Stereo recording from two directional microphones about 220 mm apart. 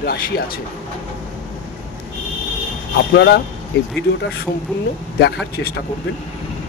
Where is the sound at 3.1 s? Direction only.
50° left (ahead or behind).